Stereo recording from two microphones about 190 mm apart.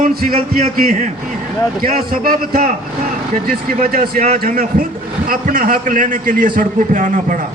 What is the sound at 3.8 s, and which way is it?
A man's voice, 45° right (ahead or behind).